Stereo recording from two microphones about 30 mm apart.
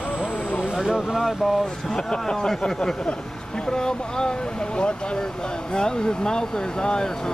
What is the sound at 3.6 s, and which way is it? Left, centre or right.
Speech, left.